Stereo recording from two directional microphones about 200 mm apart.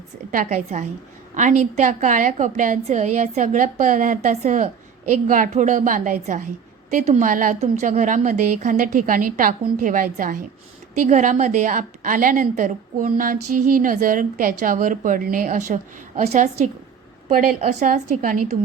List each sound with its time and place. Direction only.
0.3 s a woman's voice: 40° right (ahead or behind)